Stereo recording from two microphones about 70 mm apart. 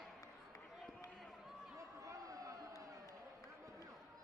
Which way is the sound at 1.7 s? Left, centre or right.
Right.